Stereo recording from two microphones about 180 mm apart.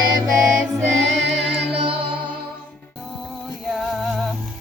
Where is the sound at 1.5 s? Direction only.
70° right (ahead or behind).